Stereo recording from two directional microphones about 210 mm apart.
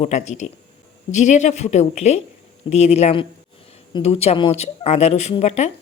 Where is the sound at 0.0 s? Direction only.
35° left (ahead or behind).